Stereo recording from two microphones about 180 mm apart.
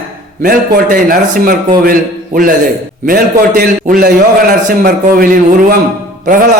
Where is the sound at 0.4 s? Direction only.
50° right (ahead or behind).